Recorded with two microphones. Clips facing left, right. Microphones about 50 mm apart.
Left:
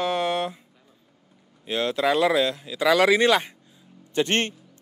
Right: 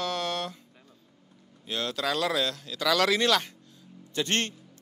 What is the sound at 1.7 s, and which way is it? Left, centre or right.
A man's voice, centre.